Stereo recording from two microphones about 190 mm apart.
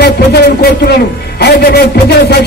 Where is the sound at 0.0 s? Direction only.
60° left (ahead or behind).